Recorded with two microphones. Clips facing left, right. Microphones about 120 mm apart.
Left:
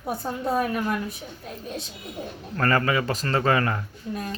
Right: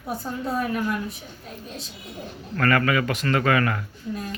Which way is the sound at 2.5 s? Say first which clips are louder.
Right 1 dB; 30° left (ahead or behind).